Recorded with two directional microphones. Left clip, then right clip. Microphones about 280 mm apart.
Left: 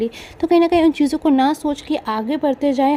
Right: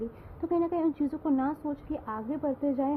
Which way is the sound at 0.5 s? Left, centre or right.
Left.